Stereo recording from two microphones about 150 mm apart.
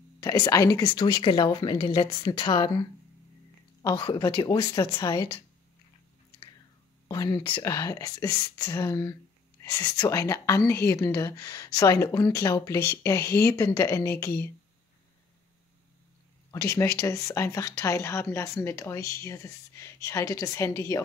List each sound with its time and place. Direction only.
0.2 s a woman's voice: 25° left (ahead or behind)
4.7 s speech: 20° left (ahead or behind)
5.1 s a woman's voice: 35° left (ahead or behind)
7.1 s speech: 25° left (ahead or behind)
16.4 s speech: 20° left (ahead or behind)